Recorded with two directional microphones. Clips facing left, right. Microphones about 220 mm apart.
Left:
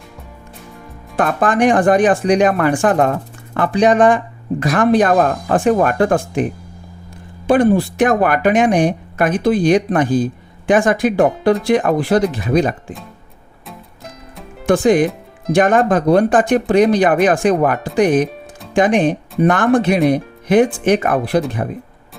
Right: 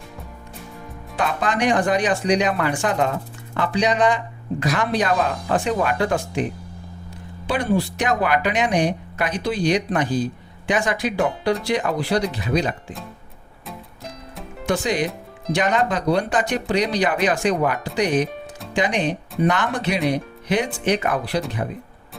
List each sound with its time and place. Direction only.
1.1 s speech: 50° left (ahead or behind)
13.7 s music: centre (ahead or behind)
14.7 s speech: 50° left (ahead or behind)